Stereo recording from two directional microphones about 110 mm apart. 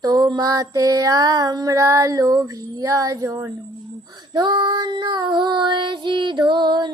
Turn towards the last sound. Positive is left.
turn(degrees=-40)  # may be behind; listen again after turning